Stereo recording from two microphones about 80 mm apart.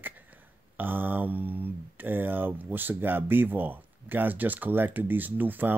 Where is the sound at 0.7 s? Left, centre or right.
Right.